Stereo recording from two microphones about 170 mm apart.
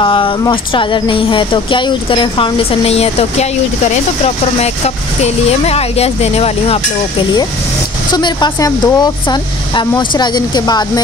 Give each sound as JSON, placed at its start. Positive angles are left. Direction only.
{"t": 0.0, "sound": "speech", "side_deg": 30}
{"t": 4.6, "sound": "speech", "side_deg": 40}
{"t": 8.1, "sound": "speech", "side_deg": 25}